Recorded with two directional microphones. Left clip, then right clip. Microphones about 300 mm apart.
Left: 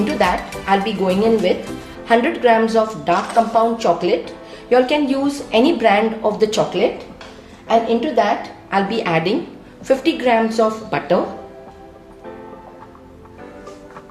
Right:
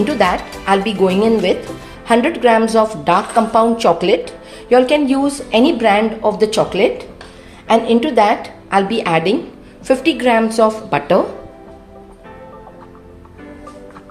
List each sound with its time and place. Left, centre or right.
0.0 s a woman's voice: centre